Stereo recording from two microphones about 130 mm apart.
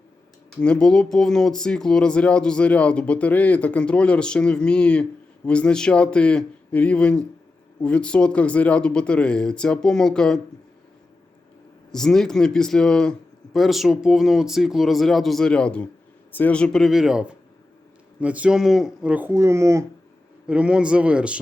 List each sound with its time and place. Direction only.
0.6 s speech: 5° left (ahead or behind)
11.9 s speech: 5° left (ahead or behind)
19.3 s speech: 20° right (ahead or behind)
20.5 s speech: 10° right (ahead or behind)